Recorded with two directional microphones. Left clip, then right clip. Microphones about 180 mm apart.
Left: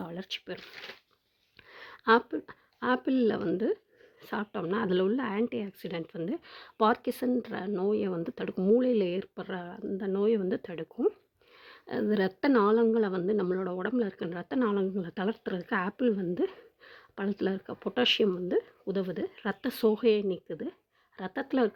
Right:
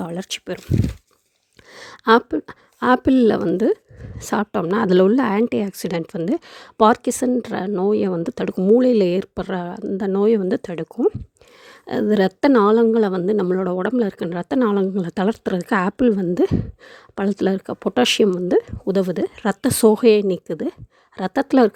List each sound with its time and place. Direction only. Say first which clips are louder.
0.0 s speech: right 10 dB; 40° right (ahead or behind)
1.7 s a woman's voice: right 9 dB; 40° right (ahead or behind)